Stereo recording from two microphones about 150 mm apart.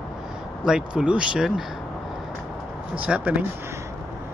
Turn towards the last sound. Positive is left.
turn(degrees=-10)  # may be behind; listen again after turning